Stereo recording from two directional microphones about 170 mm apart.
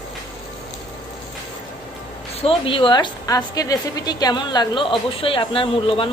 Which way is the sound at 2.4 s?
30° left (ahead or behind).